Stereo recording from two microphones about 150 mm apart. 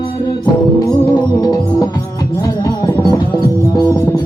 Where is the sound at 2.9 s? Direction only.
25° left (ahead or behind).